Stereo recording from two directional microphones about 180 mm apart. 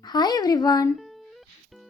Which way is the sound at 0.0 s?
20° left (ahead or behind).